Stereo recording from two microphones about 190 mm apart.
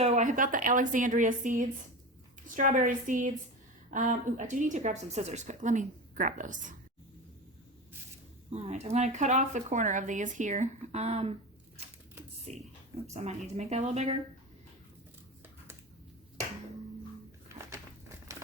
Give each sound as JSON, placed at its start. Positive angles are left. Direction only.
{"t": 0.0, "sound": "a woman's voice", "side_deg": -40}
{"t": 8.4, "sound": "speech", "side_deg": -35}
{"t": 12.5, "sound": "speech", "side_deg": -35}